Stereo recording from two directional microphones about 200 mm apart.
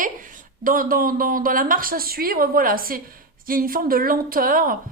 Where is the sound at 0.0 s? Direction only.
40° right (ahead or behind).